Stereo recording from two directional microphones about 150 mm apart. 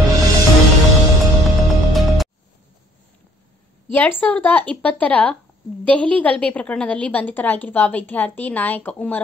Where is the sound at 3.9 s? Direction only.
15° left (ahead or behind).